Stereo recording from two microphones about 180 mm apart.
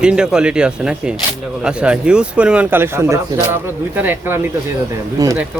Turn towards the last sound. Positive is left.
turn(degrees=-20)  # may be behind; listen again after turning